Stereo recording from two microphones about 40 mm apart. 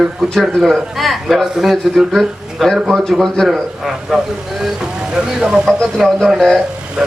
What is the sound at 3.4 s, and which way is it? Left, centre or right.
Speech, centre.